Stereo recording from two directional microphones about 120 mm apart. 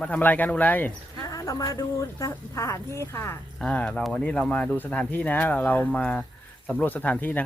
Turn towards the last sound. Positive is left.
turn(degrees=15)  # may be behind; listen again after turning